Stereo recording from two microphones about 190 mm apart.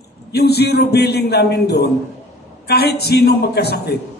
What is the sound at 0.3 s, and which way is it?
A man's voice, 60° left (ahead or behind).